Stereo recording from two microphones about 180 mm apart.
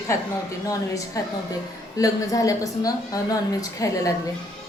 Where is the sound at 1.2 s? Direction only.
20° left (ahead or behind).